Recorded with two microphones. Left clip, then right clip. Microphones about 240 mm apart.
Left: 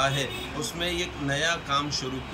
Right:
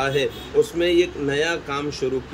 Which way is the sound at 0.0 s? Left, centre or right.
Centre.